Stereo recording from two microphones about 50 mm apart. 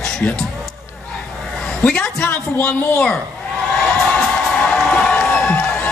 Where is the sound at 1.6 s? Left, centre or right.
Centre.